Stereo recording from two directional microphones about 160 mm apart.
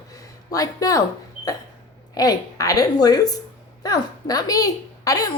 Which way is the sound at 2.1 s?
25° left (ahead or behind).